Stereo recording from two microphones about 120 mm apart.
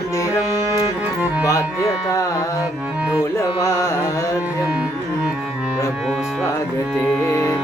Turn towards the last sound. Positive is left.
turn(degrees=25)  # may be behind; listen again after turning